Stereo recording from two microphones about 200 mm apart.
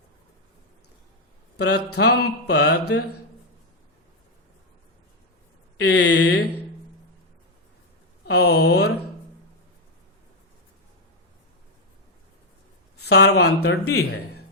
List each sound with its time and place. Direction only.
1.5 s mantra: 55° left (ahead or behind)
2.1 s mantra: 75° left (ahead or behind); by 3.0 s 55° left (ahead or behind)
5.9 s mantra: 60° left (ahead or behind)
8.3 s mantra: 55° left (ahead or behind)
13.0 s speech: 55° left (ahead or behind)
13.8 s speech: 90° left